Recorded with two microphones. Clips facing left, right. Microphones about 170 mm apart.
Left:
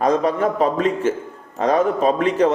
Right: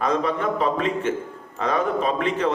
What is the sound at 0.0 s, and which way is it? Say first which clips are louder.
A man's voice: left 5 dB; 40° left (ahead or behind).